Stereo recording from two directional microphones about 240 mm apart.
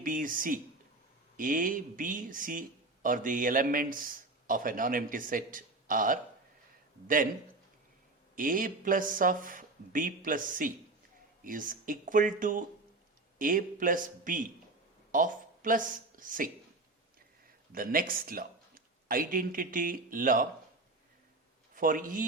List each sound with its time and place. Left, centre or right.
0.0 s speech: right
8.4 s speech: right
17.7 s speech: right
21.8 s speech: right